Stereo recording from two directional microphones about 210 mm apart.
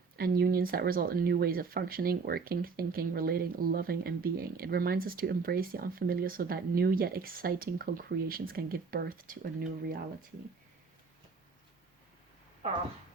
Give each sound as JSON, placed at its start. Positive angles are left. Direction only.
{"t": 0.2, "sound": "speech", "side_deg": -45}